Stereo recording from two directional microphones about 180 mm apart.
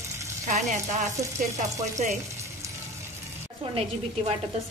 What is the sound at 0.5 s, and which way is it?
Frying, 40° right (ahead or behind).